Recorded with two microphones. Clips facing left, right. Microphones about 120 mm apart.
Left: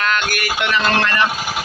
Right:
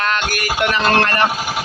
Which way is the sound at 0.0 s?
35° right (ahead or behind).